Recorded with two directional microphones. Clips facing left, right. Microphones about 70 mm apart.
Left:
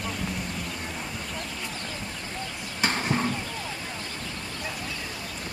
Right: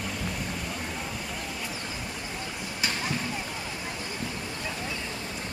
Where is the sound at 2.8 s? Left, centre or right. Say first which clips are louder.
Left 5 dB; left.